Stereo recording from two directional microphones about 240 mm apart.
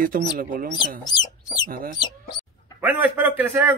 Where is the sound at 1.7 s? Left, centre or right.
Right.